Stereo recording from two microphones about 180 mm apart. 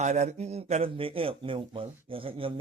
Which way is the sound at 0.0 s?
40° right (ahead or behind).